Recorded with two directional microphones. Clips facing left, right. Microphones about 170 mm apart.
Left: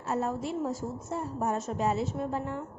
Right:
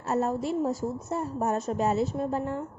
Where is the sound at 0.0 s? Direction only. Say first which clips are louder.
Right 4 dB; 40° right (ahead or behind).